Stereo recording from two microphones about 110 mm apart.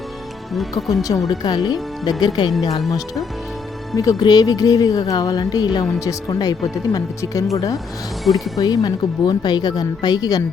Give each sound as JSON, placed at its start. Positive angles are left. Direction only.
{"t": 1.3, "sound": "speech", "side_deg": 35}
{"t": 3.9, "sound": "speech", "side_deg": 30}
{"t": 8.2, "sound": "speech", "side_deg": 0}
{"t": 8.5, "sound": "speech", "side_deg": 35}